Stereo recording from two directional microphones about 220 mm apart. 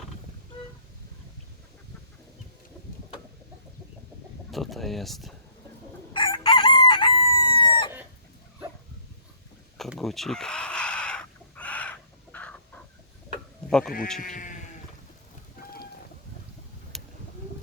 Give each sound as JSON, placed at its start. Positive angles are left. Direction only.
{"t": 4.5, "sound": "speech", "side_deg": 0}
{"t": 6.1, "sound": "chicken", "side_deg": 20}
{"t": 9.7, "sound": "a sound", "side_deg": 0}
{"t": 13.7, "sound": "speech", "side_deg": 5}
{"t": 14.2, "sound": "sheep", "side_deg": 35}
{"t": 16.9, "sound": "a sound", "side_deg": 0}